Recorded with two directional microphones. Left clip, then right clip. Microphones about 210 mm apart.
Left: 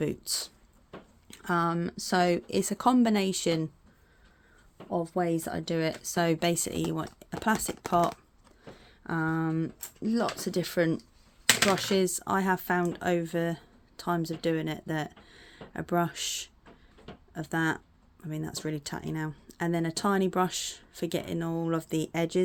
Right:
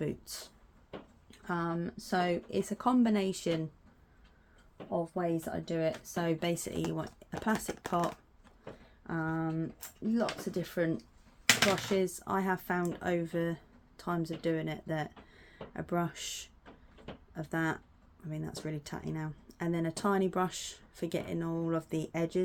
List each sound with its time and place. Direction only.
0.0 s speech: 45° left (ahead or behind)
4.9 s speech: 50° left (ahead or behind)